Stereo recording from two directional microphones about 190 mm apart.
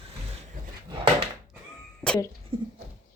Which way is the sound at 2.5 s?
25° right (ahead or behind).